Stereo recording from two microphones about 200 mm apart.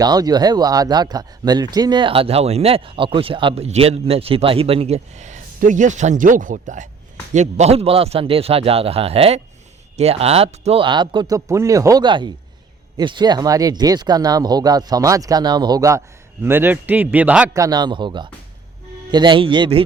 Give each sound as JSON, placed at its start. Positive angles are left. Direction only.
{"t": 0.0, "sound": "speech", "side_deg": -20}